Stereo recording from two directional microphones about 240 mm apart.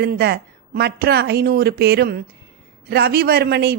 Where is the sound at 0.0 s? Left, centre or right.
Right.